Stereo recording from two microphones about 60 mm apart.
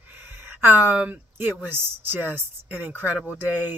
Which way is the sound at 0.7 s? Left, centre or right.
Right.